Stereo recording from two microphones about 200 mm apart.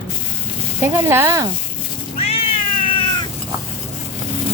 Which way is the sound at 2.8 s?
25° left (ahead or behind).